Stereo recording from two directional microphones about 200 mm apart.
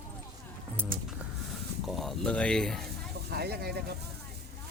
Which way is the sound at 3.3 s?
55° right (ahead or behind).